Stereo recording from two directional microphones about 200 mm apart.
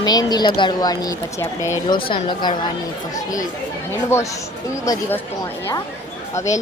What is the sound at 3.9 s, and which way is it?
Speech, 15° left (ahead or behind).